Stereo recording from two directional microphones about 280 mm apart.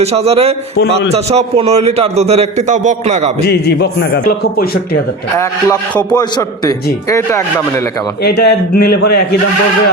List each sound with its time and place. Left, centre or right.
0.0 s a man's voice: right
3.4 s a man's voice: left
5.4 s a man's voice: centre
8.2 s a man's voice: left